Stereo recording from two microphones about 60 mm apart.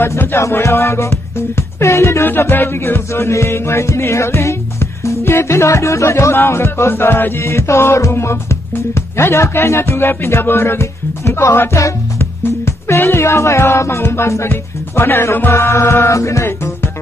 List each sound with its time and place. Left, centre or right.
0.4 s music: left
2.2 s music: left
7.4 s music: left
11.7 s speech: left
16.4 s music: left